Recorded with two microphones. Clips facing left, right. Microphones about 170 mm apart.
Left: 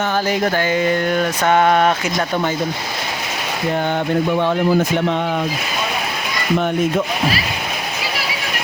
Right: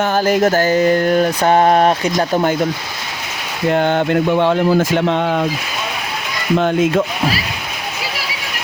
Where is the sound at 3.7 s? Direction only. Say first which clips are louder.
Right 4 dB; 70° right (ahead or behind).